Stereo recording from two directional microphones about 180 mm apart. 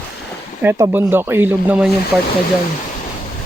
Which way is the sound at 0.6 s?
10° right (ahead or behind).